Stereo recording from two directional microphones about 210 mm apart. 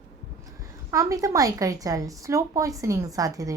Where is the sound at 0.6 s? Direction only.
15° right (ahead or behind).